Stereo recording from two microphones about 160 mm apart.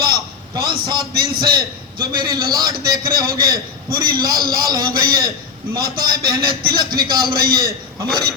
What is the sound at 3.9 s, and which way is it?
Speech, 65° right (ahead or behind).